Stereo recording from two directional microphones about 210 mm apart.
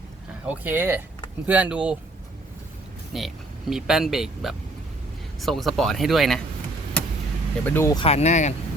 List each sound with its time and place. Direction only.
0.4 s speech: 10° right (ahead or behind)
3.1 s speech: centre (ahead or behind)
7.6 s speech: 10° left (ahead or behind)
7.9 s speech: 30° left (ahead or behind)